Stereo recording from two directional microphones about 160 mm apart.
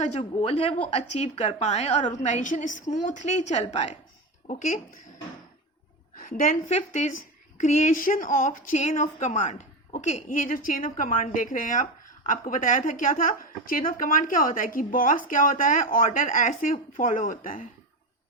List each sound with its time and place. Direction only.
0.2 s speech: 35° left (ahead or behind)
0.9 s a woman's voice: 45° left (ahead or behind)
4.4 s speech: 55° left (ahead or behind)
6.1 s a woman's voice: 60° left (ahead or behind)
6.7 s a woman's voice: 45° left (ahead or behind)